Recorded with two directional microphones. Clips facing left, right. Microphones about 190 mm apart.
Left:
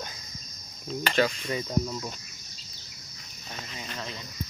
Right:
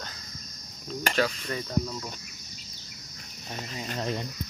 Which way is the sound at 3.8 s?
45° right (ahead or behind).